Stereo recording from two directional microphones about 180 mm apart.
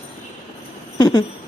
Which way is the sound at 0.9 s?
25° left (ahead or behind).